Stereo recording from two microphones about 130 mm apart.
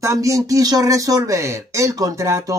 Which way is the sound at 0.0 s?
25° right (ahead or behind).